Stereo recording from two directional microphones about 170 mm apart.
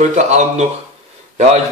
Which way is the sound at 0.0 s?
45° right (ahead or behind).